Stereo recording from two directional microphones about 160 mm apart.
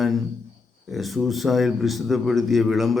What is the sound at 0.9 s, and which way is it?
A man's voice, centre (ahead or behind).